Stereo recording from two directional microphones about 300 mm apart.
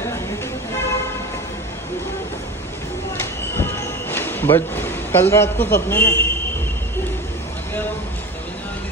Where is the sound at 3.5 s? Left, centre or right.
Centre.